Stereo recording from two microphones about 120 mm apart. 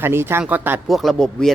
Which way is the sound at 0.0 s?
20° right (ahead or behind).